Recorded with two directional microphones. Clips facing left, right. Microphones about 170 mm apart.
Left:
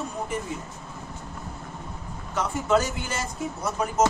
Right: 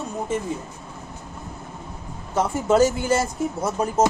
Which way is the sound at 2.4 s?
30° right (ahead or behind).